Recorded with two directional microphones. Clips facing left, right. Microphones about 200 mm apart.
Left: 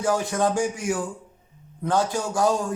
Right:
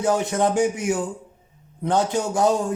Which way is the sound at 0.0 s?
20° right (ahead or behind).